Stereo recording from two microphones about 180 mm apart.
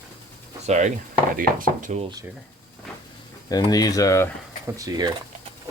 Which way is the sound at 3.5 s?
20° left (ahead or behind).